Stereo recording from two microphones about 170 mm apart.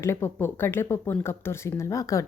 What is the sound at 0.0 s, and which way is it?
Speech, 15° left (ahead or behind).